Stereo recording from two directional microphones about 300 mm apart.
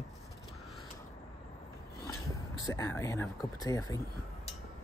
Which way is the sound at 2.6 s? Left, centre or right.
Centre.